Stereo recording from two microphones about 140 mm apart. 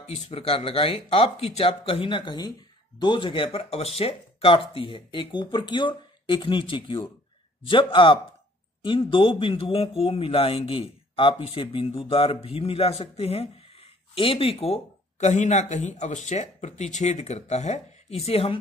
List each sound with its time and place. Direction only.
0.0 s speech: 45° left (ahead or behind)